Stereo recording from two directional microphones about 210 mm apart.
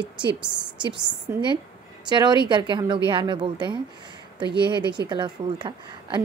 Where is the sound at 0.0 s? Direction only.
20° right (ahead or behind).